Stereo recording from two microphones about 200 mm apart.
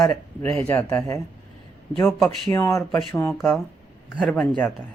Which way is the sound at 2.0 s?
Centre (ahead or behind).